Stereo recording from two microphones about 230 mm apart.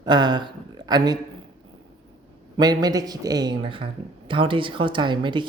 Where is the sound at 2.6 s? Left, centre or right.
Centre.